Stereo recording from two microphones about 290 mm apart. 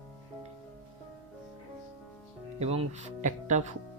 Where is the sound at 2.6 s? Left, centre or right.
Right.